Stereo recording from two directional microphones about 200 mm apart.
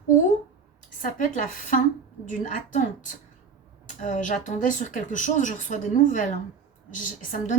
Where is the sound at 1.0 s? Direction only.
40° left (ahead or behind).